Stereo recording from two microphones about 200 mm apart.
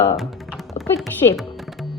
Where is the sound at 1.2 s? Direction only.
20° left (ahead or behind).